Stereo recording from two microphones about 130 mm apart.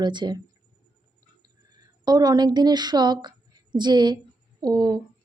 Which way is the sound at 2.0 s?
30° right (ahead or behind).